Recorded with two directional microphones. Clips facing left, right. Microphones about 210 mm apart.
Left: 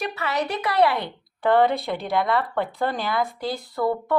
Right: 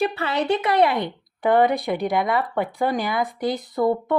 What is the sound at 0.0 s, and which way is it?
Speech, 30° right (ahead or behind).